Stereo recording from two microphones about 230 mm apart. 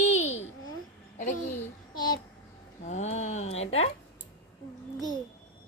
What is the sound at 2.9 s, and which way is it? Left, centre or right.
Speech, left.